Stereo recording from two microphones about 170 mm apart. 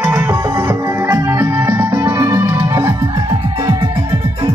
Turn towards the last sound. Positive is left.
turn(degrees=-25)  # may be behind; listen again after turning